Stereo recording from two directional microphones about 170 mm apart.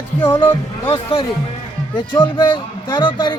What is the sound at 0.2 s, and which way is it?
Speech, 30° left (ahead or behind).